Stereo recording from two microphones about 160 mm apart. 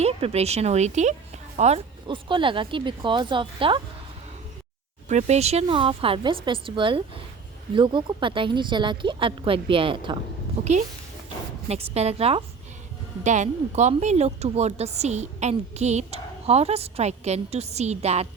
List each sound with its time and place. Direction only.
0.0 s speech: 40° right (ahead or behind)
2.0 s a woman's voice: 30° right (ahead or behind)
5.0 s a woman's voice: 45° right (ahead or behind)
10.6 s a woman's voice: 45° right (ahead or behind)